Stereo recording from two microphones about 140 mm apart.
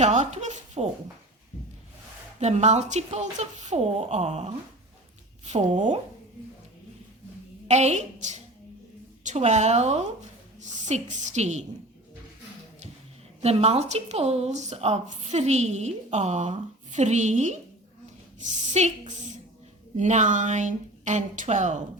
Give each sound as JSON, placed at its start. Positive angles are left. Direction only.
{"t": 0.0, "sound": "a woman's voice", "side_deg": -55}
{"t": 2.4, "sound": "a woman's voice", "side_deg": -50}
{"t": 7.7, "sound": "a woman's voice", "side_deg": -55}
{"t": 13.4, "sound": "speech", "side_deg": -45}
{"t": 18.7, "sound": "a woman's voice", "side_deg": -55}